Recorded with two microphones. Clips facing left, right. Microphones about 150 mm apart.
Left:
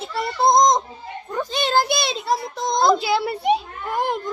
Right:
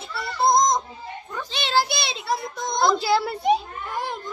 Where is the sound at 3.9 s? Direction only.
50° left (ahead or behind).